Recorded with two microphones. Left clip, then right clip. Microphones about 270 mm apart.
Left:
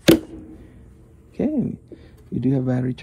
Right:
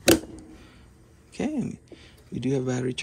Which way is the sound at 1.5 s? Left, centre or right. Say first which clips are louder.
Left 6 dB; left.